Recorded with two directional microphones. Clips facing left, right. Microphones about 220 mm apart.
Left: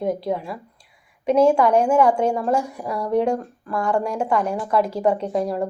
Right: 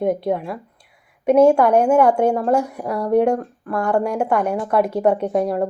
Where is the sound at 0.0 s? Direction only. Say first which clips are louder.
Right 4 dB; 60° right (ahead or behind).